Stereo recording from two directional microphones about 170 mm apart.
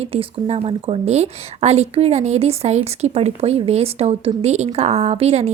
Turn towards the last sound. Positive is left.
turn(degrees=-40)  # may be behind; listen again after turning